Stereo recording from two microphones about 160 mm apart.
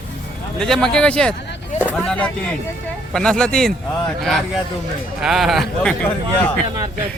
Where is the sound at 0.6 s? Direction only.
5° left (ahead or behind).